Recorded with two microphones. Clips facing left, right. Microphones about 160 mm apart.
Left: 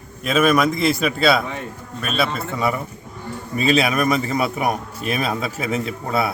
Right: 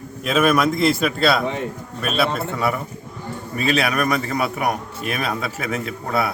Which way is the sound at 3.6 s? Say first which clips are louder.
Left 2 dB; 25° left (ahead or behind).